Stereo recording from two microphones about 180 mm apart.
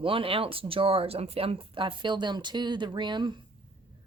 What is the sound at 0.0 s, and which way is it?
Speech, 30° right (ahead or behind).